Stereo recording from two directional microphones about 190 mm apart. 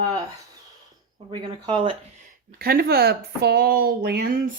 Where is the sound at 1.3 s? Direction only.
25° right (ahead or behind).